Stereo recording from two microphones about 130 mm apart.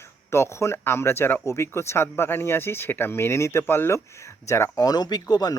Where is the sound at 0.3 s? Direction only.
20° left (ahead or behind).